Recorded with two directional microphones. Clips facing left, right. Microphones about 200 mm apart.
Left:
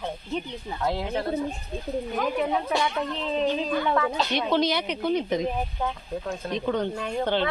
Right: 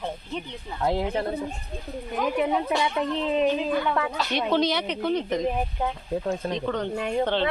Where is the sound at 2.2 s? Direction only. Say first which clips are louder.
Right 3 dB; 15° right (ahead or behind).